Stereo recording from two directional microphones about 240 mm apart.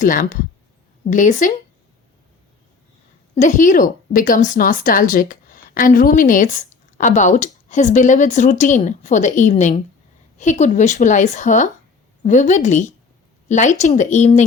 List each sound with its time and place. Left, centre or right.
0.0 s speech: left
3.3 s speech: left